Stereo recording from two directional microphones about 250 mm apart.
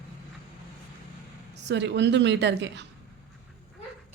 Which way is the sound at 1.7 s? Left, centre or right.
Right.